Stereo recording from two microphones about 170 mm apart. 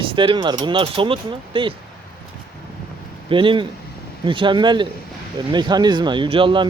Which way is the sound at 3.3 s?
30° right (ahead or behind).